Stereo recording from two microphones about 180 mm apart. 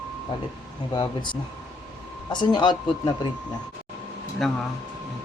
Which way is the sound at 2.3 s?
25° left (ahead or behind).